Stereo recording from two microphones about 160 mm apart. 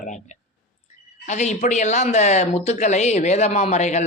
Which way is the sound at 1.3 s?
45° left (ahead or behind).